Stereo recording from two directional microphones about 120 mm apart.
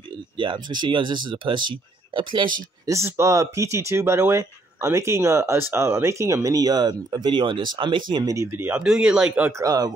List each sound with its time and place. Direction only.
0.4 s speech: 40° right (ahead or behind)
2.9 s speech: 25° right (ahead or behind)
8.5 s speech: 15° right (ahead or behind)
9.6 s speech: 30° right (ahead or behind)